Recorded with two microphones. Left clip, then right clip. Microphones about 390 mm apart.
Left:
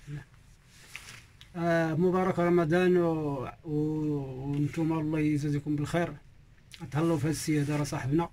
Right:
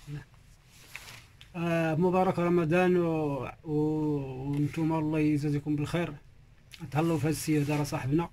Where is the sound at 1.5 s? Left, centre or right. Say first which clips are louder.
Left 2 dB; centre.